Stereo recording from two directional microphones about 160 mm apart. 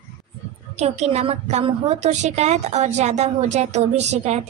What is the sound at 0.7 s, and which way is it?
A woman's voice, 45° right (ahead or behind).